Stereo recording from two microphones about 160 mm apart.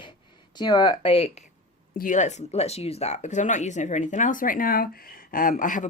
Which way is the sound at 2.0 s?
50° left (ahead or behind).